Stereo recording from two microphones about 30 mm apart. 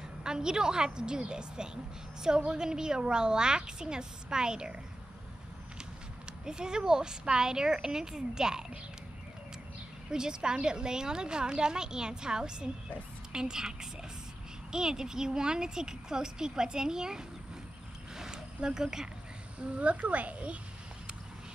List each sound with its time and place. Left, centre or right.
0.2 s speech: right
6.4 s speech: right
10.1 s speech: right
18.1 s a sound: right
19.8 s a woman's voice: right